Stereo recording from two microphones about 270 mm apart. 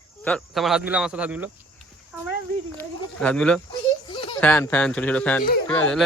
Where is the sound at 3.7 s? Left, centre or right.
Centre.